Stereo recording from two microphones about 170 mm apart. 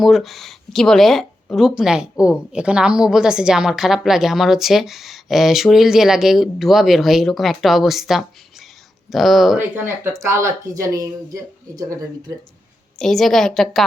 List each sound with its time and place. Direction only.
0.0 s speech: centre (ahead or behind)
9.6 s speech: 15° right (ahead or behind)
13.0 s speech: centre (ahead or behind)